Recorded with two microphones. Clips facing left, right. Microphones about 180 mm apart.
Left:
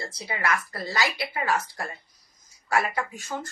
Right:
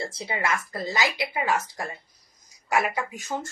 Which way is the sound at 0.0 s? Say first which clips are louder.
Right 1 dB; 25° right (ahead or behind).